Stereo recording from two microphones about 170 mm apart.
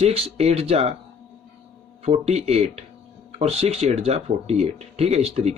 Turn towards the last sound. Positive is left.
turn(degrees=-40)  # may be behind; listen again after turning